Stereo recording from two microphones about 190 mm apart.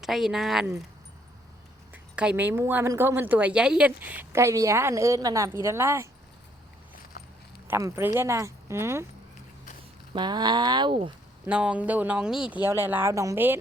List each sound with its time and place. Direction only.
0.0 s speech: centre (ahead or behind)
1.9 s speech: 10° right (ahead or behind)
7.7 s speech: 15° right (ahead or behind)
10.2 s speech: 20° right (ahead or behind)
11.4 s speech: 5° right (ahead or behind)